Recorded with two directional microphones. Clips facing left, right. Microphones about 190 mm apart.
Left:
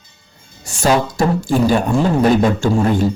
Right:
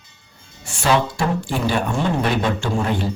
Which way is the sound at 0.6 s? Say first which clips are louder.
Left 3 dB; 40° left (ahead or behind).